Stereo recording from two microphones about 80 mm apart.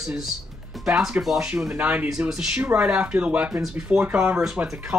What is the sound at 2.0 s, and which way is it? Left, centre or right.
Speech, centre.